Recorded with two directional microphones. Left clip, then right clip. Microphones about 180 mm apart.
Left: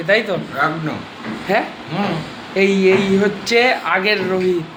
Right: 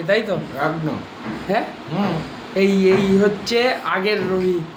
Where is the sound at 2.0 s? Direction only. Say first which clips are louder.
Left 2 dB; 15° right (ahead or behind).